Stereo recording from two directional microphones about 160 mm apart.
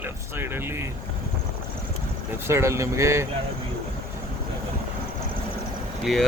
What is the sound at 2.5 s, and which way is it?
Speech, 15° right (ahead or behind).